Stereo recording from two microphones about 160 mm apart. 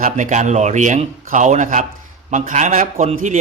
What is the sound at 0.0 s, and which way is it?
Speech, 50° right (ahead or behind).